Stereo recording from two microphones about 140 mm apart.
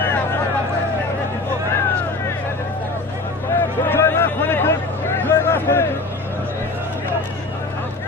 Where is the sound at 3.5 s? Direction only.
15° left (ahead or behind).